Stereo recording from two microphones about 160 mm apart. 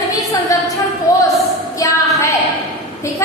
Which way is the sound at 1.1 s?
20° left (ahead or behind).